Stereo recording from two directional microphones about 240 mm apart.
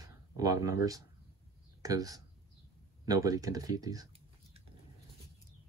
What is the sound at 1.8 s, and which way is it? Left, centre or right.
Speech, centre.